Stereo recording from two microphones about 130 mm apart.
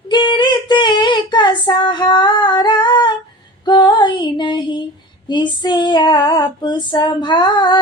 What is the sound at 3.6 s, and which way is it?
Female singing, 35° left (ahead or behind).